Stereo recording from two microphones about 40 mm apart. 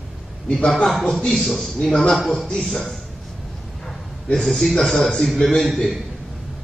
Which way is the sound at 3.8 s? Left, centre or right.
Centre.